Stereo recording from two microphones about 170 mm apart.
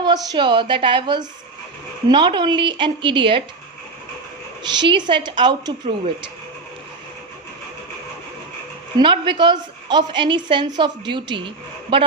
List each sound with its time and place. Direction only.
0.0 s a woman's voice: 25° right (ahead or behind)
4.6 s a woman's voice: 25° right (ahead or behind)
9.0 s a woman's voice: 30° right (ahead or behind)